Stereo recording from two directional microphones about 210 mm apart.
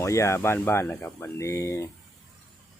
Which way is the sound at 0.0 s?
15° left (ahead or behind).